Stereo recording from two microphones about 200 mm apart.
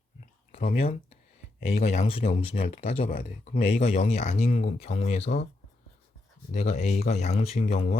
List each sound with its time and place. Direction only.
1.6 s speech: 30° left (ahead or behind)
3.1 s speech: 40° left (ahead or behind)
6.5 s speech: 35° left (ahead or behind)